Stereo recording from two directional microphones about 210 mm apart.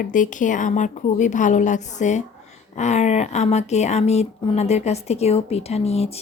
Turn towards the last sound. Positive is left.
turn(degrees=30)  # may be behind; listen again after turning